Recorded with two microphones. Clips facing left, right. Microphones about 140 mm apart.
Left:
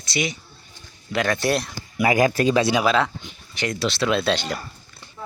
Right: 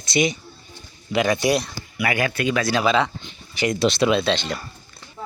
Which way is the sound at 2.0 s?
40° left (ahead or behind).